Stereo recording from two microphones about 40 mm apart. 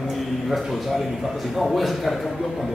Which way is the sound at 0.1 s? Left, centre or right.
Centre.